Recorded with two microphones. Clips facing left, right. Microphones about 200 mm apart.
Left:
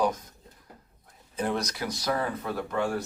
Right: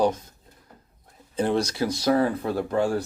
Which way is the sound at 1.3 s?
30° right (ahead or behind).